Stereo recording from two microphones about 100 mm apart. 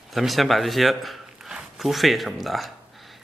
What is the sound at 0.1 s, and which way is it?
Speech, centre (ahead or behind).